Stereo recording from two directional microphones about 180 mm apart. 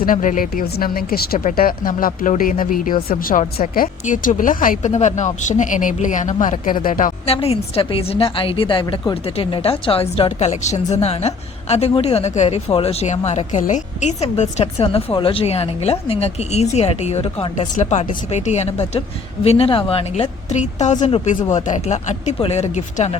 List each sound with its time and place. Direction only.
0.0 s a woman's voice: 45° left (ahead or behind)
7.3 s a woman's voice: 35° left (ahead or behind)